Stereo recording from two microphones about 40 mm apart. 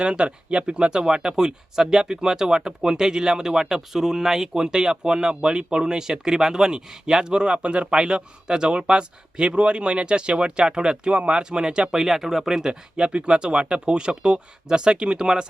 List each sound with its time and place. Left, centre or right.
0.0 s speech: right
12.0 s speech: centre
13.0 s speech: right